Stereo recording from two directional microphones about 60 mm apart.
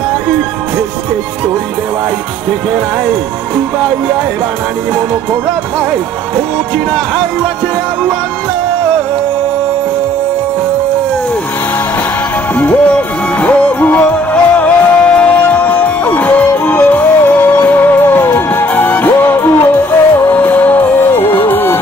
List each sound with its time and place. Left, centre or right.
12.5 s speech: left
13.4 s music: left
17.4 s music: left